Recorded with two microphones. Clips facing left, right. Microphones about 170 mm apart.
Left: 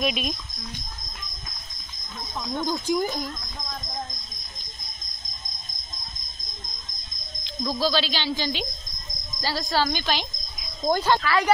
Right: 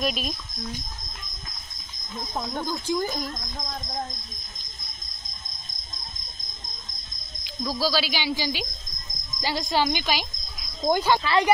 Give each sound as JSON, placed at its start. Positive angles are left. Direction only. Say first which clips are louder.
{"t": 0.0, "sound": "speech", "louder": "left 1 dB", "side_deg": 0}
{"t": 2.6, "sound": "speech", "louder": "left 4 dB", "side_deg": 15}
{"t": 7.8, "sound": "a woman's voice", "louder": "left 1 dB", "side_deg": -10}
{"t": 11.2, "sound": "speech", "louder": "right 2 dB", "side_deg": -20}